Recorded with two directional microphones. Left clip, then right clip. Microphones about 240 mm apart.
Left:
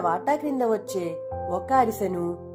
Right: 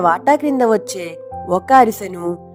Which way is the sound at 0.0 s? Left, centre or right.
Right.